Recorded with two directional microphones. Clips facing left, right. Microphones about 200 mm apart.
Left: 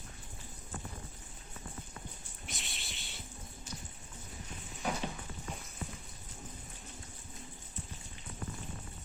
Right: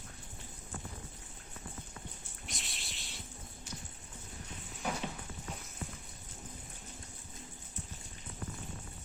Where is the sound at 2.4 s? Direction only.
Centre (ahead or behind).